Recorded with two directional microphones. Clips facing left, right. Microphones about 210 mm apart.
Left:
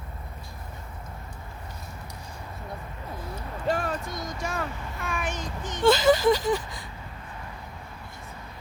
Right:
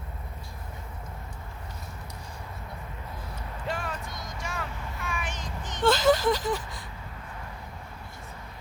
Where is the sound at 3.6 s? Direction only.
35° left (ahead or behind).